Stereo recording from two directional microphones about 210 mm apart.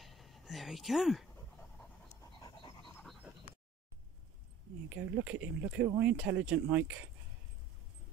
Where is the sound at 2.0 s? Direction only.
20° left (ahead or behind).